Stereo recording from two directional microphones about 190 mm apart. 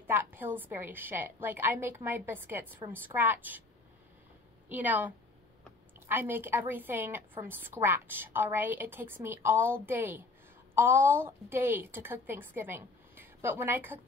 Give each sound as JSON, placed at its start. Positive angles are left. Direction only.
{"t": 0.0, "sound": "a woman's voice", "side_deg": -10}
{"t": 4.6, "sound": "a woman's voice", "side_deg": -10}